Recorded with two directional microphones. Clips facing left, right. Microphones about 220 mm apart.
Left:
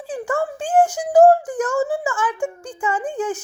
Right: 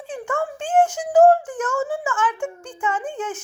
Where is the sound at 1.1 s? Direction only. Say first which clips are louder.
Left 2 dB; 10° left (ahead or behind).